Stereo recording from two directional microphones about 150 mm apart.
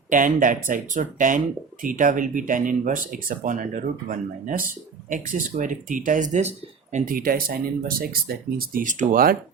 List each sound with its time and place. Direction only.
0.1 s speech: 60° right (ahead or behind)
6.9 s speech: 65° right (ahead or behind)